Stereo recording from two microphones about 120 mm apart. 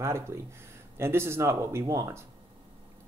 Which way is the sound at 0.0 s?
25° right (ahead or behind).